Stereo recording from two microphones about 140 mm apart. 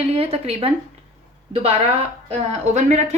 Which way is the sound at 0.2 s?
45° right (ahead or behind).